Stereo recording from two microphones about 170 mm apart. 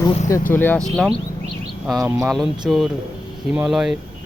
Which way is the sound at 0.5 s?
10° left (ahead or behind).